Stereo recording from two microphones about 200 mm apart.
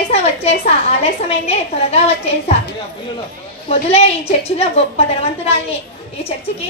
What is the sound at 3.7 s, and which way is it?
A woman's voice, 30° left (ahead or behind).